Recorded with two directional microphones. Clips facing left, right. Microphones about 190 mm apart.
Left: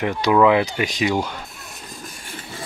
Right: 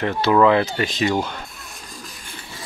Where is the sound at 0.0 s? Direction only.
10° left (ahead or behind).